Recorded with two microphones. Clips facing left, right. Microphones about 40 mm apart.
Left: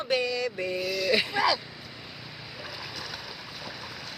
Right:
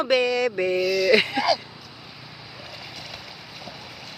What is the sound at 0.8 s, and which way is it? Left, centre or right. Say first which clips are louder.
Speech: right 7 dB; right.